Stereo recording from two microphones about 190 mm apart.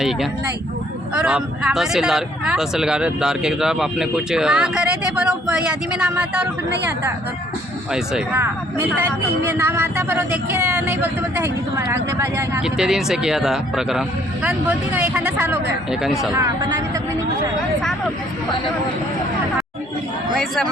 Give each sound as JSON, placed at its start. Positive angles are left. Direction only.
{"t": 1.1, "sound": "speech", "side_deg": -5}
{"t": 7.9, "sound": "speech", "side_deg": -5}
{"t": 12.6, "sound": "speech", "side_deg": -5}
{"t": 16.3, "sound": "speech", "side_deg": -15}
{"t": 20.3, "sound": "a man's voice", "side_deg": 0}